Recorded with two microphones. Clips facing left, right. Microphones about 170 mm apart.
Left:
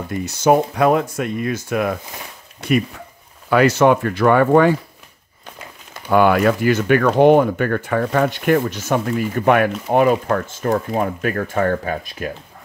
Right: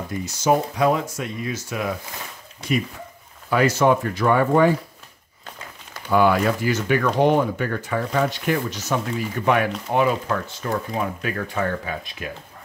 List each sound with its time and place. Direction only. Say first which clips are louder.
0.1 s speech: left 5 dB; 60° left (ahead or behind)
6.0 s speech: left 4 dB; 60° left (ahead or behind); by 12.3 s 45° left (ahead or behind)